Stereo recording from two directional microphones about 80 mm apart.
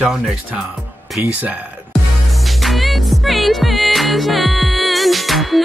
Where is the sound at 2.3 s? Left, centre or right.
Centre.